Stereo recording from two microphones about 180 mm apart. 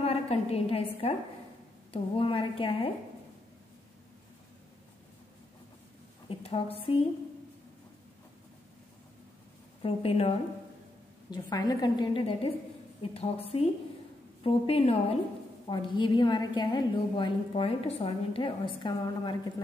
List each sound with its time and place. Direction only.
0.0 s a sound: 35° left (ahead or behind)
1.9 s a woman's voice: 30° left (ahead or behind)
6.2 s a woman's voice: 30° left (ahead or behind)
9.8 s a woman's voice: 30° left (ahead or behind)
11.2 s a woman's voice: 25° left (ahead or behind)